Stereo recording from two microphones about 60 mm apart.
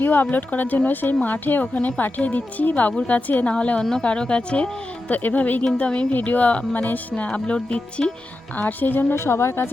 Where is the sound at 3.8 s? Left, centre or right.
Centre.